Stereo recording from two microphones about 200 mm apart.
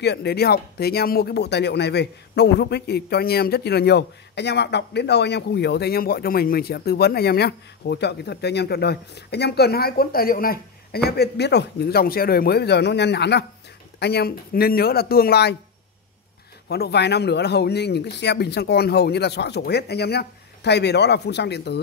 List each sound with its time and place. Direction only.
0.0 s speech: 55° left (ahead or behind)
16.6 s speech: 55° left (ahead or behind)